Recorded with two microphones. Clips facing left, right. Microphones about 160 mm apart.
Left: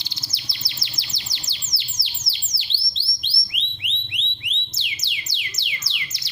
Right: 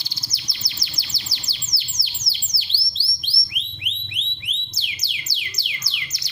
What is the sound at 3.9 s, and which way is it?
Theremin, 20° left (ahead or behind).